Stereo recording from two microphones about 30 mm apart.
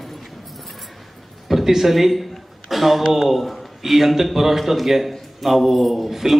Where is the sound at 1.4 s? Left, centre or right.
Centre.